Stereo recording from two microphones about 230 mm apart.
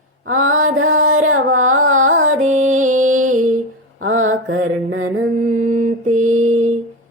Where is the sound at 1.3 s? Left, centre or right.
Right.